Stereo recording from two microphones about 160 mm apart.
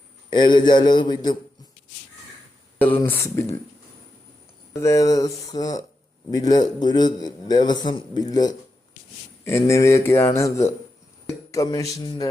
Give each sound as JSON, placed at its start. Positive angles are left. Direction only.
{"t": 0.3, "sound": "a man's voice", "side_deg": 30}
{"t": 3.0, "sound": "speech", "side_deg": 15}
{"t": 4.7, "sound": "a man's voice", "side_deg": 20}